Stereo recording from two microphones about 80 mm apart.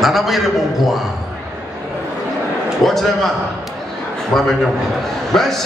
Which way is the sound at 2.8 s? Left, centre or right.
Centre.